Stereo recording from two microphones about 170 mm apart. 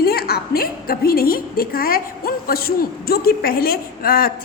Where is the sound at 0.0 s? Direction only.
65° left (ahead or behind).